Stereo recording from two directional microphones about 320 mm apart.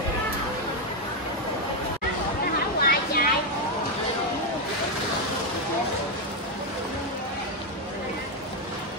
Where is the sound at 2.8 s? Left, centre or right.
Left.